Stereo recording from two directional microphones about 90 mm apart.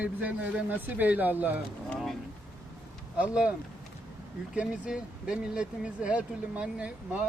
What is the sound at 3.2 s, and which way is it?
Speech, 10° right (ahead or behind).